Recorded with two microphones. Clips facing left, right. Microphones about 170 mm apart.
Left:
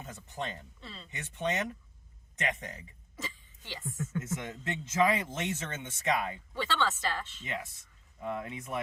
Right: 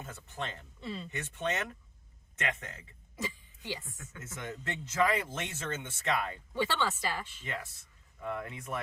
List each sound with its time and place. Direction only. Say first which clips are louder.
0.0 s speech: left 1 dB; 20° left (ahead or behind)
0.8 s speech: right 8 dB; 15° right (ahead or behind)
1.1 s speech: left 3 dB; 15° left (ahead or behind)
3.2 s a sound: right 4 dB; 15° right (ahead or behind)
3.8 s speech: left 14 dB; 45° left (ahead or behind)
4.2 s speech: right 1 dB; 20° left (ahead or behind)
6.5 s speech: even; 15° right (ahead or behind)
8.2 s speech: left 1 dB; 20° left (ahead or behind)